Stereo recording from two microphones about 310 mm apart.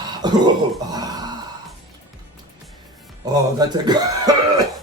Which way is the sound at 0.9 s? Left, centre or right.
Centre.